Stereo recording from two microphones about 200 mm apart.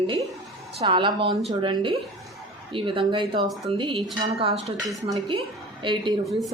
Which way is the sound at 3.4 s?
Centre (ahead or behind).